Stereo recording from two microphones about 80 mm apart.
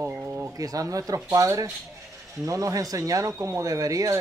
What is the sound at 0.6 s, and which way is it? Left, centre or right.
Speech, right.